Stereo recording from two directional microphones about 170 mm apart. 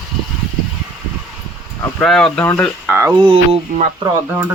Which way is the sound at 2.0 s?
5° left (ahead or behind).